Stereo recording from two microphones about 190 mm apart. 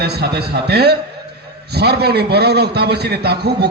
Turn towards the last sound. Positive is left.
turn(degrees=-60)  # may be behind; listen again after turning